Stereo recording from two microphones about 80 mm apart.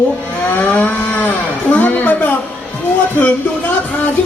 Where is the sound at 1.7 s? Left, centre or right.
Left.